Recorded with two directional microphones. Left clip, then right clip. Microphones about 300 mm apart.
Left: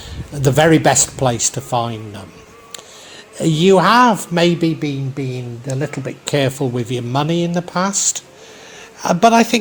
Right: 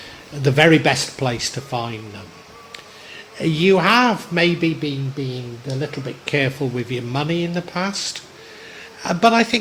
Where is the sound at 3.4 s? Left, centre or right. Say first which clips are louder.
Left 4 dB; centre.